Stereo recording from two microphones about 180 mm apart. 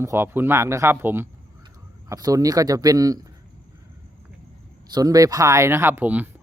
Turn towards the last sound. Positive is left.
turn(degrees=-10)  # may be behind; listen again after turning